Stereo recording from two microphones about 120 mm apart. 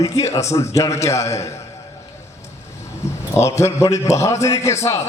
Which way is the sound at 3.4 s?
25° left (ahead or behind).